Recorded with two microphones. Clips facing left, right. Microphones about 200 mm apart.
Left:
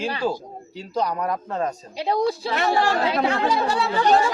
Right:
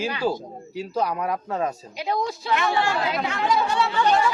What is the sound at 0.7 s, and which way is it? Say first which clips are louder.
Speech: even; 5° right (ahead or behind).